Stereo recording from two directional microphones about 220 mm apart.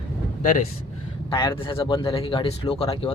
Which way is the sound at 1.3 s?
20° left (ahead or behind).